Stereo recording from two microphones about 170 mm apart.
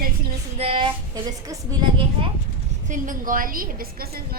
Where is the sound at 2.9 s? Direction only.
50° right (ahead or behind).